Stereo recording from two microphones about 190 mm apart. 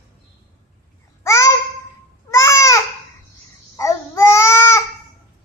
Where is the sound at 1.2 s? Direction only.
15° left (ahead or behind).